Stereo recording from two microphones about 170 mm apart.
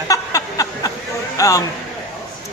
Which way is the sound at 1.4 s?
20° left (ahead or behind).